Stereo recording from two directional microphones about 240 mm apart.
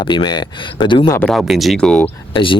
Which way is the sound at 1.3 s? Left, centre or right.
Centre.